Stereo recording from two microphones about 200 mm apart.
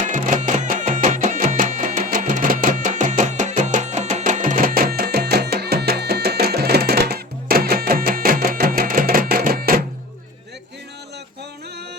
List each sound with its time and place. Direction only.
0.0 s music: 40° right (ahead or behind)